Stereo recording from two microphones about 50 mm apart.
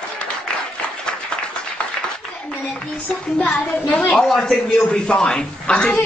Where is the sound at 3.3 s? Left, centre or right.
Left.